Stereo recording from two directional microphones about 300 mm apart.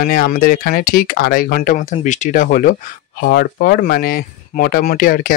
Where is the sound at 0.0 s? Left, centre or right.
Left.